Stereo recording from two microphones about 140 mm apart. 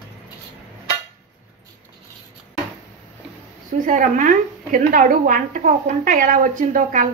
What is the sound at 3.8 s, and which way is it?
A woman's voice, 70° right (ahead or behind).